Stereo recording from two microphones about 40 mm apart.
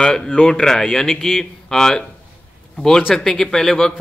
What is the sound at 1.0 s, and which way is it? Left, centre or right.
Speech, centre.